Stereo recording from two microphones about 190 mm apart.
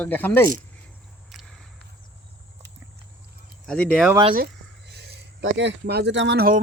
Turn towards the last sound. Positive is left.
turn(degrees=-50)  # may be behind; listen again after turning